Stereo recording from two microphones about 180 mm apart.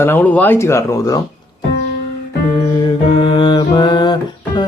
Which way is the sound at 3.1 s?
25° left (ahead or behind).